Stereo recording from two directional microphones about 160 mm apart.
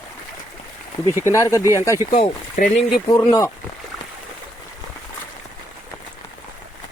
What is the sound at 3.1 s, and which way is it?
Speech, 20° left (ahead or behind).